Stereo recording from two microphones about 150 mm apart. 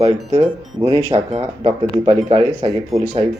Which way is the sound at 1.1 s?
45° right (ahead or behind).